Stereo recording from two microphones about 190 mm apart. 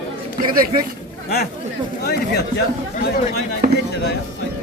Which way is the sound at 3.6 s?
50° right (ahead or behind).